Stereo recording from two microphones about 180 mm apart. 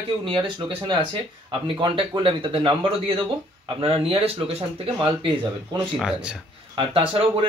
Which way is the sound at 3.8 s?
30° right (ahead or behind).